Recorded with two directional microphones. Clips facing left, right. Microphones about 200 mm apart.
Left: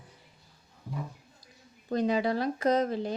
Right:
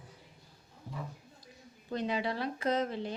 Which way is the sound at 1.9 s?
40° left (ahead or behind).